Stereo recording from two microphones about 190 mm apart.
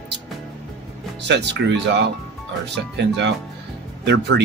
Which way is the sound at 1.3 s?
65° right (ahead or behind).